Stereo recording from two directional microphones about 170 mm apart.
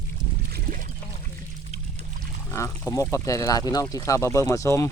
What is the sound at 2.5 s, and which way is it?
Speech, 20° left (ahead or behind).